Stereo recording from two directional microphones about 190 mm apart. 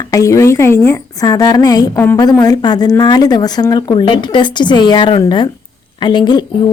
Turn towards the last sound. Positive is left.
turn(degrees=25)  # may be behind; listen again after turning